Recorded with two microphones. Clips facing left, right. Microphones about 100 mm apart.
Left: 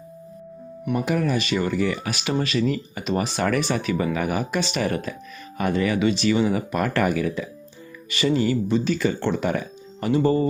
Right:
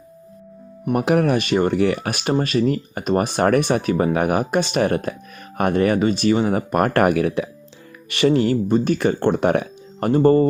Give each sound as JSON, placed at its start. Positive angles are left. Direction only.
{"t": 0.9, "sound": "speech", "side_deg": -65}